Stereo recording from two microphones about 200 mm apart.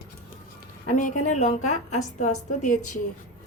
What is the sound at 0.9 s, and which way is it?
A woman's voice, 40° left (ahead or behind).